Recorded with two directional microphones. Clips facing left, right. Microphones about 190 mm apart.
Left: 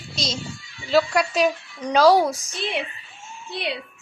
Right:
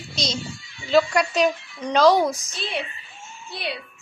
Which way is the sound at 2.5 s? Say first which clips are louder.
Left 2 dB; 20° left (ahead or behind).